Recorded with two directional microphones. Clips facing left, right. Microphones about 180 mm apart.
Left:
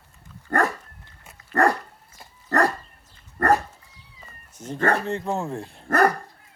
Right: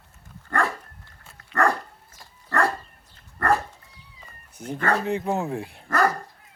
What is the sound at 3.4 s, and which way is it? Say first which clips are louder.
Dog: left 3 dB; 45° left (ahead or behind).